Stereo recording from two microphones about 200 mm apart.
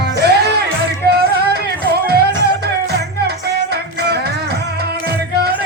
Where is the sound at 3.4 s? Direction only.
55° right (ahead or behind).